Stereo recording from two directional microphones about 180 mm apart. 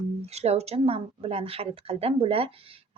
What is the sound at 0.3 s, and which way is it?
Speech, 35° right (ahead or behind).